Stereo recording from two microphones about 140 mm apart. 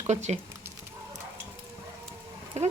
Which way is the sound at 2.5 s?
50° right (ahead or behind).